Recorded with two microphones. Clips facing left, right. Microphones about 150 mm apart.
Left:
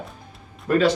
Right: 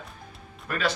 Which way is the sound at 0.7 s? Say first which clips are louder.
Left 10 dB; 15° left (ahead or behind).